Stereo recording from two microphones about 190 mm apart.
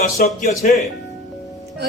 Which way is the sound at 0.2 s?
45° left (ahead or behind).